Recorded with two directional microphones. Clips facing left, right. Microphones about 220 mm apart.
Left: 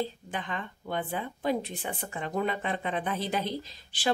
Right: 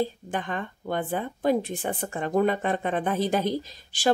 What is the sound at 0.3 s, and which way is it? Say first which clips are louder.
Speech: right 5 dB; 50° right (ahead or behind).